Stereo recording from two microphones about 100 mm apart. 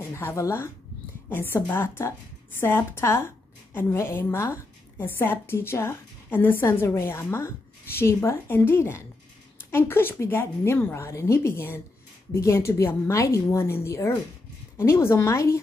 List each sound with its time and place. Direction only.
0.0 s a woman's voice: 25° left (ahead or behind)